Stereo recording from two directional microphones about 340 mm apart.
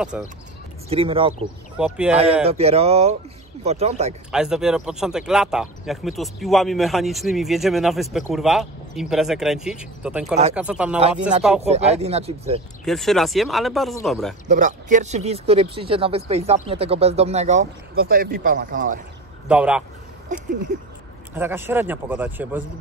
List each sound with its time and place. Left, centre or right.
0.1 s speech: centre
0.8 s speech: centre
1.8 s speech: centre
2.4 s speech: centre
4.3 s speech: centre
11.0 s speech: centre
12.8 s speech: centre
14.5 s speech: right
19.4 s speech: centre
21.4 s speech: centre